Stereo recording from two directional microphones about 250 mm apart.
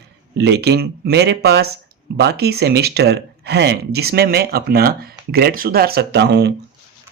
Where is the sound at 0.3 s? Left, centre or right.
Right.